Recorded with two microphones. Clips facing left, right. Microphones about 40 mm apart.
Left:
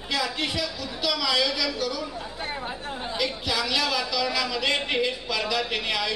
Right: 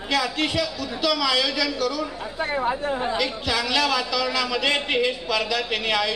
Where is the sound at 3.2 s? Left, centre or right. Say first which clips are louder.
Right 3 dB; centre.